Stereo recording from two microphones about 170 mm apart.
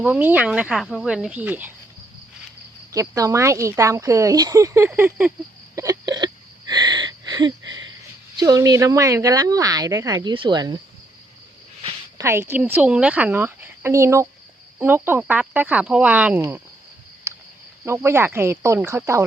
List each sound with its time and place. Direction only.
0.0 s speech: 10° right (ahead or behind)
2.9 s speech: 20° right (ahead or behind)
5.7 s hiccup: 20° right (ahead or behind)
8.4 s speech: 20° right (ahead or behind)
12.1 s speech: 15° right (ahead or behind)
17.3 s a sound: 15° right (ahead or behind)
17.8 s speech: 15° right (ahead or behind)